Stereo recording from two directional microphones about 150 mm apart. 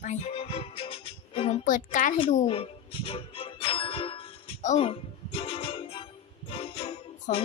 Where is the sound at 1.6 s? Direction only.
60° left (ahead or behind).